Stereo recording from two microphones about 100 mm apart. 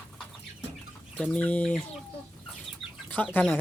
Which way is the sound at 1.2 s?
15° left (ahead or behind).